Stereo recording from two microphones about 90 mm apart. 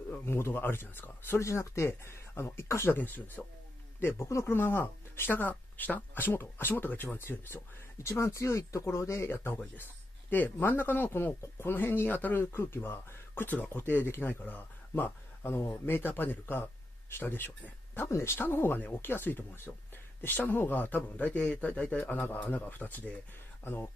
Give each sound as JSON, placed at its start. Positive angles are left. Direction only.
{"t": 0.1, "sound": "speech", "side_deg": 25}